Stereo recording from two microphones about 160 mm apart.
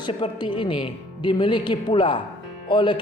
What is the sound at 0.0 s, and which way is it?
A man's voice, 35° left (ahead or behind).